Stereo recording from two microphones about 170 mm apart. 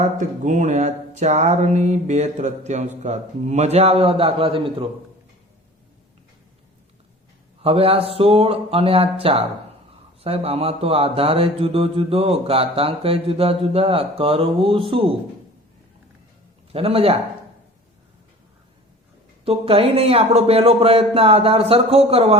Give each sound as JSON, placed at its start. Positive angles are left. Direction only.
{"t": 0.0, "sound": "speech", "side_deg": -50}
{"t": 3.0, "sound": "mantra", "side_deg": -45}
{"t": 7.6, "sound": "mantra", "side_deg": -35}
{"t": 16.7, "sound": "mantra", "side_deg": -35}
{"t": 19.5, "sound": "mantra", "side_deg": -35}